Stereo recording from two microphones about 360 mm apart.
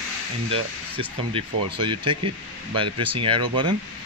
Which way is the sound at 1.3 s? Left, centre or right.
Centre.